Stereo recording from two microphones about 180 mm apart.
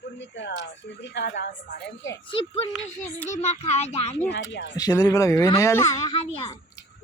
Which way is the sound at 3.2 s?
40° left (ahead or behind).